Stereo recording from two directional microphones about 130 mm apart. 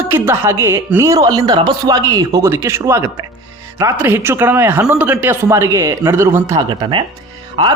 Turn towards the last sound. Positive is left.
turn(degrees=-35)  # may be behind; listen again after turning